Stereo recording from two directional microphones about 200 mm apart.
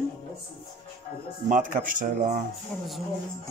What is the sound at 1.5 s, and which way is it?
Speech, 40° right (ahead or behind).